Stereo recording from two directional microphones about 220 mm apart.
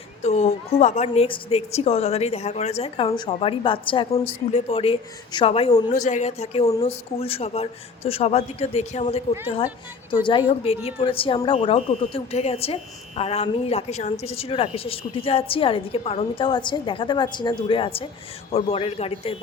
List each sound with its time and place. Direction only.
0.2 s speech: 30° left (ahead or behind)